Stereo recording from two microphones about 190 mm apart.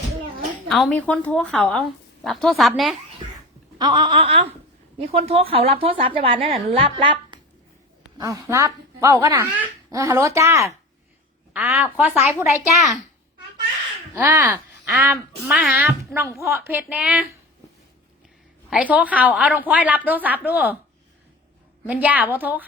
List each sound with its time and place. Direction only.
0.7 s a woman's voice: 5° left (ahead or behind)
3.8 s a woman's voice: 20° right (ahead or behind)
14.1 s speech: 10° right (ahead or behind)
18.7 s speech: 10° right (ahead or behind)
21.8 s speech: 10° right (ahead or behind)